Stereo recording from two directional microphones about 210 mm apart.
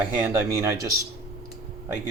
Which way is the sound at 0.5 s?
15° right (ahead or behind).